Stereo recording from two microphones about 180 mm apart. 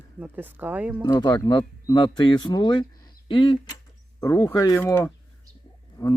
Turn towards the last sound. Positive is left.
turn(degrees=20)  # may be behind; listen again after turning